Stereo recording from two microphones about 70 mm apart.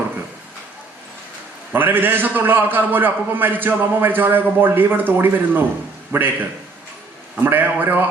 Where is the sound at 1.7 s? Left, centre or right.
Right.